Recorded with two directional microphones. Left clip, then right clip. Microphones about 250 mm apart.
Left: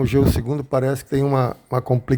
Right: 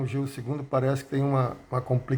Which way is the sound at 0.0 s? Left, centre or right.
Left.